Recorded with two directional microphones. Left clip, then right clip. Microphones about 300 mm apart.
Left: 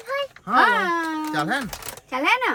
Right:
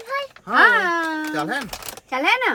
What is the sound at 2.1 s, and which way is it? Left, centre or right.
Speech, right.